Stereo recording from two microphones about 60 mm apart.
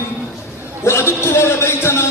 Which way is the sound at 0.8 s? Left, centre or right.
Left.